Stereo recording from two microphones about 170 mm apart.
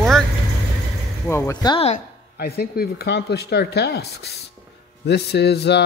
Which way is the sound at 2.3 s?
65° left (ahead or behind).